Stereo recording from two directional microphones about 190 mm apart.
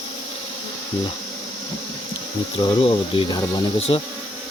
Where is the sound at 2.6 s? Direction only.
30° left (ahead or behind).